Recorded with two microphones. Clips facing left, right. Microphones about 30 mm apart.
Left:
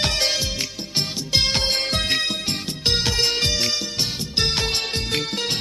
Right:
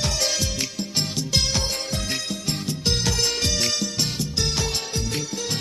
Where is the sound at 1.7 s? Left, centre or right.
Left.